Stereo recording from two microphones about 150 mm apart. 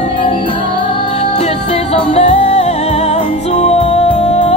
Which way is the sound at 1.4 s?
45° left (ahead or behind).